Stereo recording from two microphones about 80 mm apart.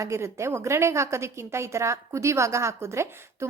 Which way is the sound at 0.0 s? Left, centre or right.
Right.